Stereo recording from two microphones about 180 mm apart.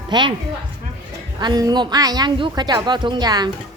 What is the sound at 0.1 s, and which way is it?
Speech, 25° right (ahead or behind).